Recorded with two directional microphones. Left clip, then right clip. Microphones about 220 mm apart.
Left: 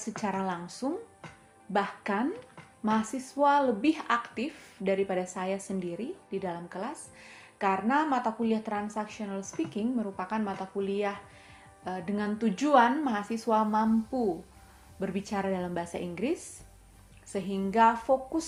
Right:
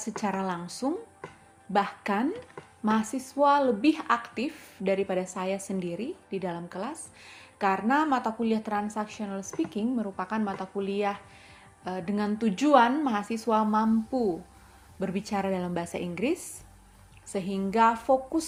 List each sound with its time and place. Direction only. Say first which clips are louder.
0.0 s speech: right 2 dB; 25° right (ahead or behind)